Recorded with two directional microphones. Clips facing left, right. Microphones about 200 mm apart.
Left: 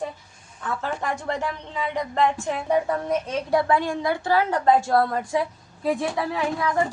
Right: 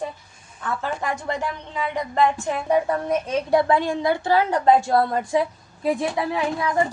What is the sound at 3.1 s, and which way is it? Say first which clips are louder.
A woman's voice: right 3 dB; 15° right (ahead or behind).